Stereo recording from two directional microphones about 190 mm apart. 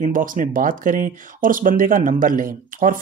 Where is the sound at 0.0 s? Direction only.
45° right (ahead or behind).